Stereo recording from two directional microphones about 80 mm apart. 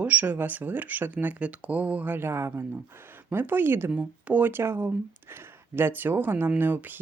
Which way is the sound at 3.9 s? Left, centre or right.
Centre.